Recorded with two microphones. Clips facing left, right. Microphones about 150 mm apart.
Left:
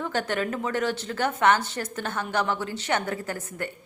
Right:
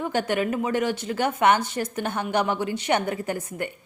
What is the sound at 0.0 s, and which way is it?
A woman's voice, 15° right (ahead or behind).